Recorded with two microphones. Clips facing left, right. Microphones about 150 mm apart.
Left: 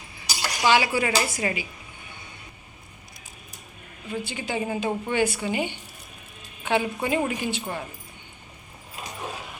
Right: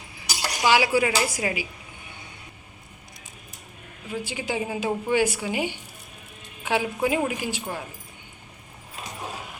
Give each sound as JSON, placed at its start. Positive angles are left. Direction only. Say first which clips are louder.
{"t": 0.6, "sound": "a woman's voice", "louder": "right 1 dB", "side_deg": -10}
{"t": 4.1, "sound": "a woman's voice", "louder": "even", "side_deg": -10}